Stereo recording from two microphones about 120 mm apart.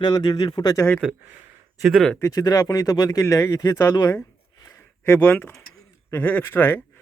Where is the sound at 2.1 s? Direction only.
25° left (ahead or behind).